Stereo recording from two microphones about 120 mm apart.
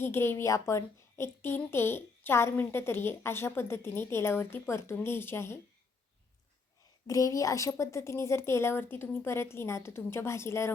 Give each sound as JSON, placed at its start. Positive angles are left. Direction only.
{"t": 0.0, "sound": "a woman's voice", "side_deg": 20}
{"t": 7.1, "sound": "a woman's voice", "side_deg": 25}